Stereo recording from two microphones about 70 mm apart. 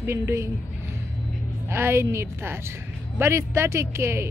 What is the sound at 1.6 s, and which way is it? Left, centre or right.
A woman's voice, right.